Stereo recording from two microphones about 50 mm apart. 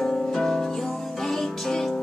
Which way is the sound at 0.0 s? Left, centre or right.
Centre.